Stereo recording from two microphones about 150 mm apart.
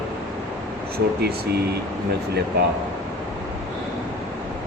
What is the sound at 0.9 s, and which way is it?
Speech, 90° right.